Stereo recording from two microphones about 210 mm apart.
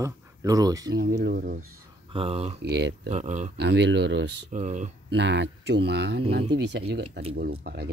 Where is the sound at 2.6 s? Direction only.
55° right (ahead or behind).